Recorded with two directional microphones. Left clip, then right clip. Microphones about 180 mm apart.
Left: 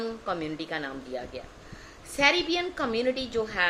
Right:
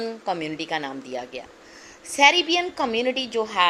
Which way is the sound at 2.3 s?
15° left (ahead or behind).